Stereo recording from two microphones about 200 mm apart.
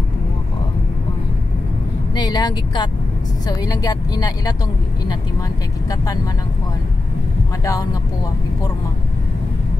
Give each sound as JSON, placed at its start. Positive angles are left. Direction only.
{"t": 2.1, "sound": "speech", "side_deg": 20}